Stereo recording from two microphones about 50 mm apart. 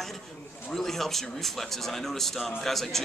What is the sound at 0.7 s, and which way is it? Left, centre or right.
Speech, centre.